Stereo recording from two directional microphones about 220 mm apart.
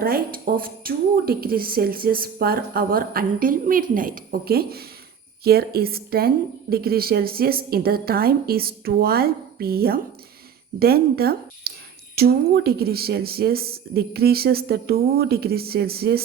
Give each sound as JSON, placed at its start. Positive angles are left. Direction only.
{"t": 0.0, "sound": "a woman's voice", "side_deg": -40}